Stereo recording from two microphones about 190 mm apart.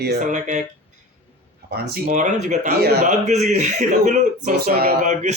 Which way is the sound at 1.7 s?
55° right (ahead or behind).